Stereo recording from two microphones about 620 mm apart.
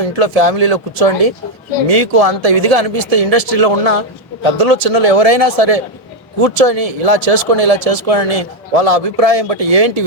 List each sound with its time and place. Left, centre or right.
0.0 s speech: right